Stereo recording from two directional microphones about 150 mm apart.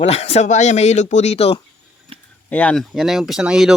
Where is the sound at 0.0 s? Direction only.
45° left (ahead or behind).